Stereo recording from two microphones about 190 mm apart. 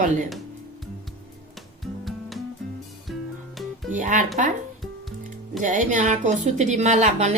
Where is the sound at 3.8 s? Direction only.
40° right (ahead or behind).